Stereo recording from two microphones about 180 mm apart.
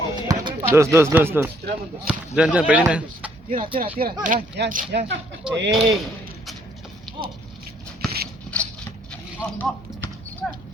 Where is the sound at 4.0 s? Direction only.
50° right (ahead or behind).